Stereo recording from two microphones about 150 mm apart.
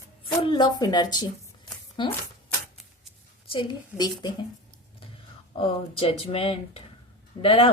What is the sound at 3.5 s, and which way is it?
Speech, 30° left (ahead or behind).